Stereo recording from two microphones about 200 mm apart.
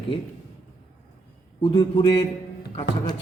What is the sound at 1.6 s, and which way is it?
A man's voice, 25° left (ahead or behind).